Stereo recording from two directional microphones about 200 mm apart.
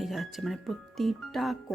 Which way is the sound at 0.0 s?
Centre (ahead or behind).